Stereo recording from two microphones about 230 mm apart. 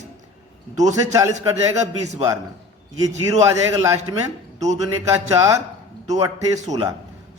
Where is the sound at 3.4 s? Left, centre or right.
Centre.